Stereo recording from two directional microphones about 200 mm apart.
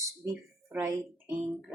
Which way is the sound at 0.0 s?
15° right (ahead or behind).